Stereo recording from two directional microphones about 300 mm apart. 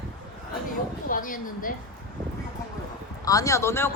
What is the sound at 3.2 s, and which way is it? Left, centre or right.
Speech, centre.